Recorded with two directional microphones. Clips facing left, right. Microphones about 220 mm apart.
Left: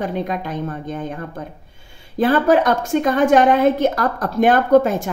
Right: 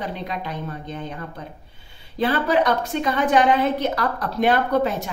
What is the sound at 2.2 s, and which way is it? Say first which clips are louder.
A woman's voice: left 5 dB; 45° left (ahead or behind).